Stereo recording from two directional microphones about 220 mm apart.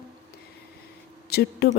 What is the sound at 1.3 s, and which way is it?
Speech, 45° left (ahead or behind).